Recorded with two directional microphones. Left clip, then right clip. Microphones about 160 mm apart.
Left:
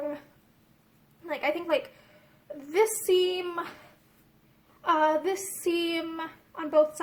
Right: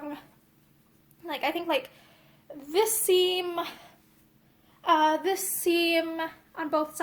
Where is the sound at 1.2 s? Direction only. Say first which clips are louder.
Even; 20° right (ahead or behind).